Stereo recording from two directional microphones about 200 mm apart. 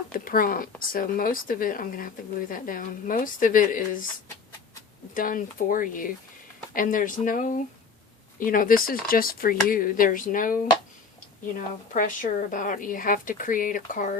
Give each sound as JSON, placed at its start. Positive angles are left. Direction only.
{"t": 0.1, "sound": "speech", "side_deg": 45}
{"t": 5.1, "sound": "a woman's voice", "side_deg": 45}
{"t": 11.9, "sound": "a woman's voice", "side_deg": 40}